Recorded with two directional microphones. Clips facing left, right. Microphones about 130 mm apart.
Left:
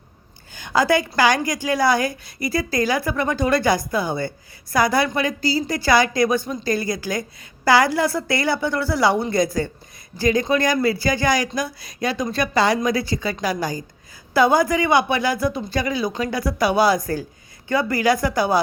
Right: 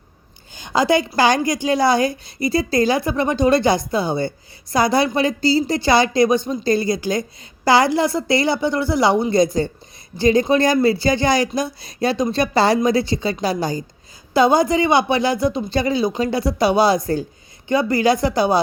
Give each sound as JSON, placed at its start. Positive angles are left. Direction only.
{"t": 0.5, "sound": "a woman's voice", "side_deg": -20}